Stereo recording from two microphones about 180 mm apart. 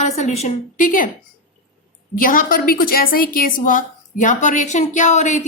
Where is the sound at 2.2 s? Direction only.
50° left (ahead or behind).